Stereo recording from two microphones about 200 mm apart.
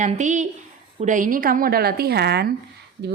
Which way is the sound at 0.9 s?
40° right (ahead or behind).